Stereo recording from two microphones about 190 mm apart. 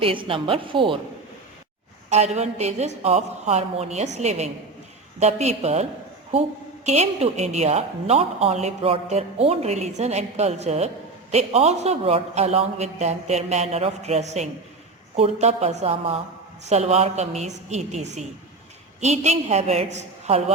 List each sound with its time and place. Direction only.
0.0 s a woman's voice: 25° right (ahead or behind)
2.0 s a woman's voice: 35° right (ahead or behind)
6.8 s a woman's voice: 35° right (ahead or behind)